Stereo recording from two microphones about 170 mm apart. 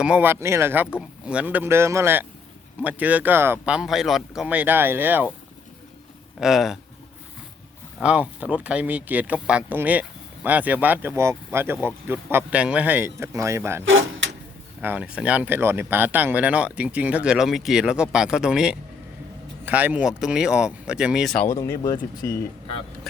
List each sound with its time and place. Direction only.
0.0 s speech: 10° right (ahead or behind)
6.4 s speech: centre (ahead or behind)
8.0 s speech: 5° right (ahead or behind)
21.4 s speech: 15° left (ahead or behind)